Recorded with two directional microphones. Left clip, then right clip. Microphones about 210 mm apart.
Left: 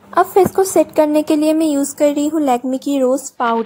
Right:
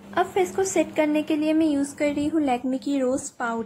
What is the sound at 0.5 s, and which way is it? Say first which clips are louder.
Speech: left 10 dB; 25° left (ahead or behind).